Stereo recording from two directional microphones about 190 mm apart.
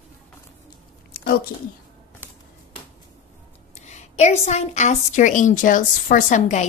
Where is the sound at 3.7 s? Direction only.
35° left (ahead or behind).